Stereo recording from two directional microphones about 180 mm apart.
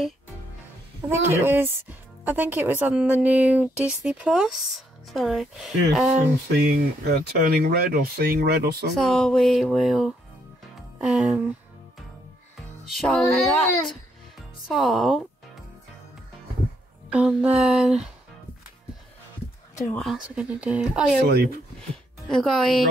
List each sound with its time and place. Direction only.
1.0 s speech: 10° right (ahead or behind)
6.5 s speech: 60° right (ahead or behind)
8.9 s speech: centre (ahead or behind)
12.8 s music: centre (ahead or behind)
13.3 s speech: centre (ahead or behind)
17.1 s speech: 5° right (ahead or behind)
19.9 s speech: centre (ahead or behind)
21.3 s speech: 60° right (ahead or behind)
22.3 s speech: centre (ahead or behind)